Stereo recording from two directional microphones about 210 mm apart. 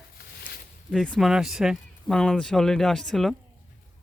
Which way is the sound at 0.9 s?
5° left (ahead or behind).